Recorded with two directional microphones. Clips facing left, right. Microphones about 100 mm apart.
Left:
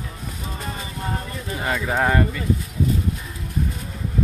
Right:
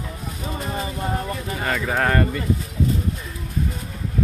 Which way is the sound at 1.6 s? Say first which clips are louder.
Left 1 dB; 10° left (ahead or behind).